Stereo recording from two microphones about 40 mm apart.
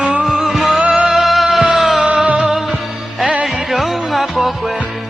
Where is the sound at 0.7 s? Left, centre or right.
Right.